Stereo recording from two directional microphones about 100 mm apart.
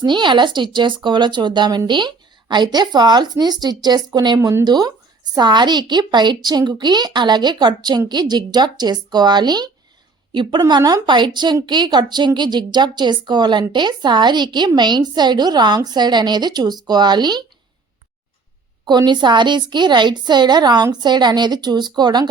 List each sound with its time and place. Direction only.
0.0 s a woman's voice: 50° right (ahead or behind)
4.4 s speech: 25° right (ahead or behind)
4.6 s a woman's voice: 40° right (ahead or behind)
10.7 s a woman's voice: 45° right (ahead or behind)
18.9 s a woman's voice: 45° right (ahead or behind)